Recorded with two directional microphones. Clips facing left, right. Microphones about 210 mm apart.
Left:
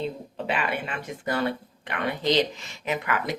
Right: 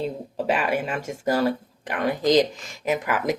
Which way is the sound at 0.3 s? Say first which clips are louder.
Right 6 dB; 40° right (ahead or behind).